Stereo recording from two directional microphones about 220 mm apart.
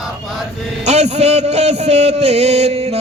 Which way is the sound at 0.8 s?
30° right (ahead or behind).